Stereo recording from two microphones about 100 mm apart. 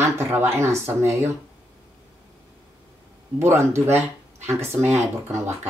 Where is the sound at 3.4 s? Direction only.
25° right (ahead or behind).